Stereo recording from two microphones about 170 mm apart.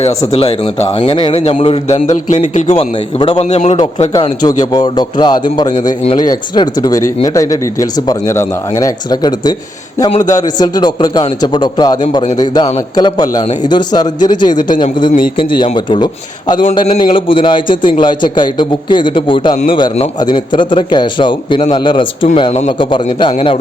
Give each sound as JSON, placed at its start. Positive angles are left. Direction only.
{"t": 0.3, "sound": "a man's voice", "side_deg": 35}
{"t": 3.8, "sound": "a man's voice", "side_deg": 25}
{"t": 13.0, "sound": "a man's voice", "side_deg": 25}